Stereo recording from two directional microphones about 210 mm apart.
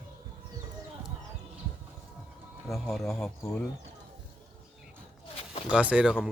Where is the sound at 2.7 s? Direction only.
15° left (ahead or behind).